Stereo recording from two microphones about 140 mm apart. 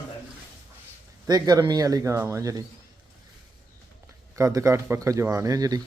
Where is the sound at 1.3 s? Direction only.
30° right (ahead or behind).